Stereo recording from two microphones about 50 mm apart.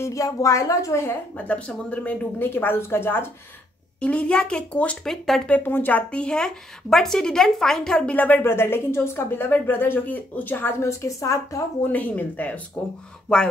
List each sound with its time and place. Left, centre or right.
0.0 s a woman's voice: left
1.7 s speech: left
2.3 s a woman's voice: left
4.0 s speech: left
5.0 s a woman's voice: centre
5.6 s a woman's voice: left
5.9 s a woman's voice: left
8.1 s speech: left
8.4 s a woman's voice: left
10.8 s a woman's voice: left
11.8 s speech: left
12.8 s speech: left